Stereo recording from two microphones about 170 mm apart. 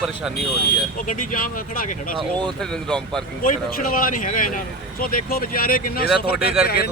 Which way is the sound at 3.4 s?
55° left (ahead or behind).